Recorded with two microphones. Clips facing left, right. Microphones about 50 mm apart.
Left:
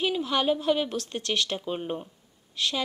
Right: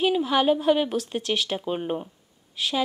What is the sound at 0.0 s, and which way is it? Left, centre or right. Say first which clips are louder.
Speech: right 4 dB; centre.